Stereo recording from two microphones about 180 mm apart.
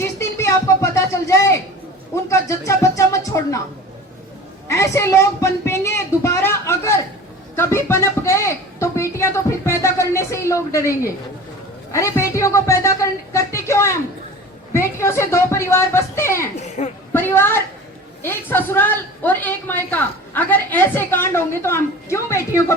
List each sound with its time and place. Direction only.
0.0 s a sound: 15° left (ahead or behind)
2.3 s a woman's voice: 15° left (ahead or behind)
4.7 s a woman's voice: 15° left (ahead or behind)
16.6 s speech: 40° left (ahead or behind)
17.1 s a woman's voice: 10° left (ahead or behind)